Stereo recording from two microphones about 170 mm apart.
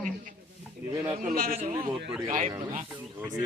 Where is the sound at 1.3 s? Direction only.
60° right (ahead or behind).